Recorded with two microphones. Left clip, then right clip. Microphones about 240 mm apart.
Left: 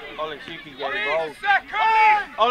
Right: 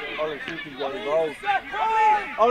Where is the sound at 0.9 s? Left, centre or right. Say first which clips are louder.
Left 1 dB; centre.